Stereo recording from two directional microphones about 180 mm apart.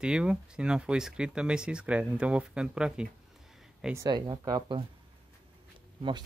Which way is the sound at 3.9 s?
20° right (ahead or behind).